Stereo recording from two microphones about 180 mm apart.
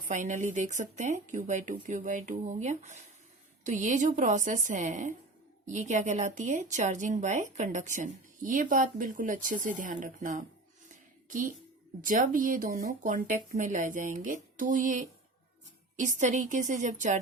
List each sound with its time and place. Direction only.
0.0 s a woman's voice: 45° right (ahead or behind)
10.8 s a sound: 45° right (ahead or behind)
12.0 s a woman's voice: 50° right (ahead or behind)